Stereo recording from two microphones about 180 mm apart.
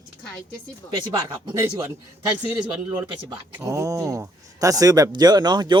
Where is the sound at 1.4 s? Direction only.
20° right (ahead or behind).